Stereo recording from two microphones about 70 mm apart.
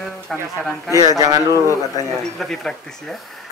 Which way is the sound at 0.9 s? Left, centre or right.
Left.